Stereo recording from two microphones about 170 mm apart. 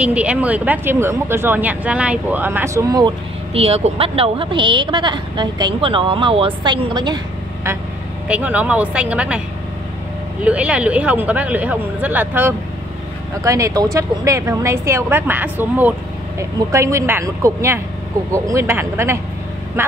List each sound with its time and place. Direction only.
0.0 s speech: 5° right (ahead or behind)
3.5 s speech: 35° right (ahead or behind)
8.3 s speech: 10° right (ahead or behind)
10.4 s speech: 10° right (ahead or behind)